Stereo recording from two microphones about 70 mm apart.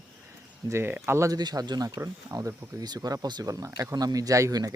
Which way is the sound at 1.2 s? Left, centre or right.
Right.